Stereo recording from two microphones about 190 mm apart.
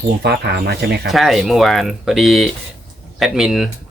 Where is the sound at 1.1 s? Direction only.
Centre (ahead or behind).